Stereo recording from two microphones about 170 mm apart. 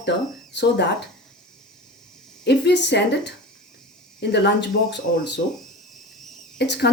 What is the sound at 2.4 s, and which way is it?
Speech, 90° left.